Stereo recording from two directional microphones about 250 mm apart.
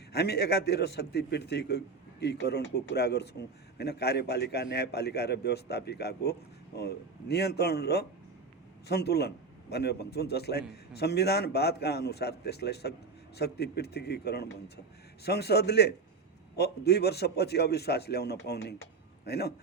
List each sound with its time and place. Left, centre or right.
0.1 s a man's voice: left